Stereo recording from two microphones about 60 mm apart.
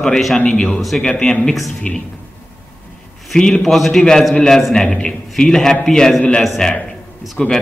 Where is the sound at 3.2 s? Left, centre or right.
Centre.